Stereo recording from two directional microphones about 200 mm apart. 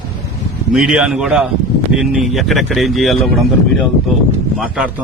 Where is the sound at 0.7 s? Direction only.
5° right (ahead or behind).